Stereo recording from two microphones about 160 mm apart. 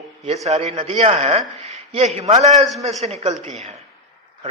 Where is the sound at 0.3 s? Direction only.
45° right (ahead or behind).